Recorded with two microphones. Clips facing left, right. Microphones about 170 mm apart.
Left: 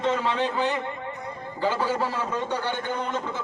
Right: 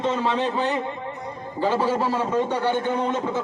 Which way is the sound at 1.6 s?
30° right (ahead or behind).